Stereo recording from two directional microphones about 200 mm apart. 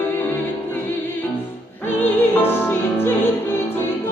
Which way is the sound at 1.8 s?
10° left (ahead or behind).